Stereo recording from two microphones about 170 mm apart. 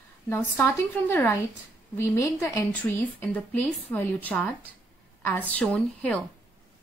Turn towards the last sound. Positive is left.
turn(degrees=5)  # may be behind; listen again after turning